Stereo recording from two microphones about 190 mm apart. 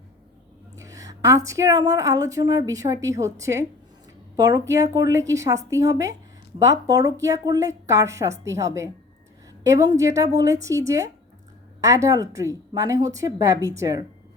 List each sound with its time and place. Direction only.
0.8 s a woman's voice: 15° right (ahead or behind)